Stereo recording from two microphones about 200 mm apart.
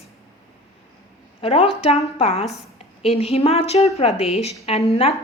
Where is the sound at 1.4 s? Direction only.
30° left (ahead or behind).